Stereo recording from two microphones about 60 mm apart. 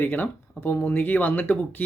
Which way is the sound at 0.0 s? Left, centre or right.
Left.